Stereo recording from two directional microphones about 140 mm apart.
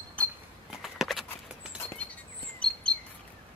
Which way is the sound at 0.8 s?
Centre (ahead or behind).